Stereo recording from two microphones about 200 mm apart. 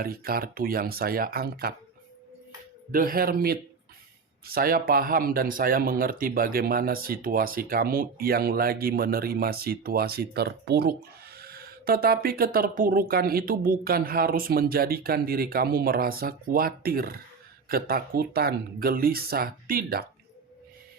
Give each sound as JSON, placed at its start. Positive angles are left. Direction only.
{"t": 0.0, "sound": "speech", "side_deg": -50}
{"t": 2.9, "sound": "speech", "side_deg": -45}